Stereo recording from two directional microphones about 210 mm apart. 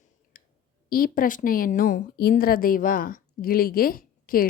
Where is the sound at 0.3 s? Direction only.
40° left (ahead or behind).